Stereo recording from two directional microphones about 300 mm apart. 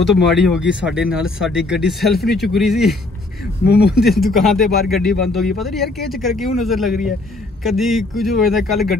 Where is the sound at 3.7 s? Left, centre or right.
Left.